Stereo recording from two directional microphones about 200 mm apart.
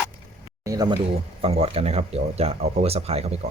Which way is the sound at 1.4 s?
30° right (ahead or behind).